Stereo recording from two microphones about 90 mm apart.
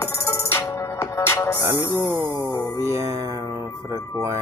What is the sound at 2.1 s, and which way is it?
Music, 70° right (ahead or behind).